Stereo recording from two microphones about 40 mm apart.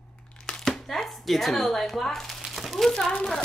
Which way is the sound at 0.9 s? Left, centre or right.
Centre.